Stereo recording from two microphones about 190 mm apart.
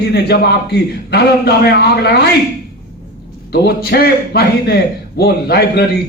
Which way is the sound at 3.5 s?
60° left (ahead or behind).